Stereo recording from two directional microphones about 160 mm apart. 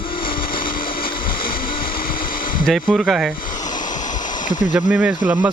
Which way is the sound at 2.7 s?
5° right (ahead or behind).